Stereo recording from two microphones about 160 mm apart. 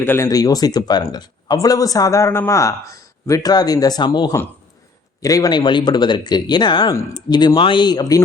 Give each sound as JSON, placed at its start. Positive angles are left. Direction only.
{"t": 0.0, "sound": "speech", "side_deg": 15}